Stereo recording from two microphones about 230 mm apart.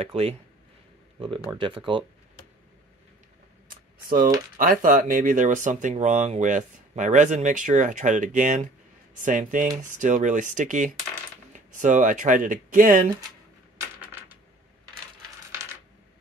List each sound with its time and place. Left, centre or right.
0.0 s speech: right
1.5 s speech: right
3.6 s a sound: right
4.6 s speech: right
13.7 s typewriter: centre